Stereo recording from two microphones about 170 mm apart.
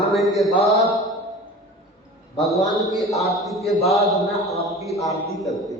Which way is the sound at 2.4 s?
Centre (ahead or behind).